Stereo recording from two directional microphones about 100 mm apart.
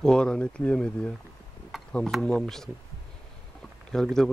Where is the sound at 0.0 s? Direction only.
5° left (ahead or behind).